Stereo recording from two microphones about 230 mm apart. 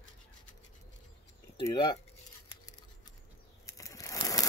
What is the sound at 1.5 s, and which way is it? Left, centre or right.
Speech, centre.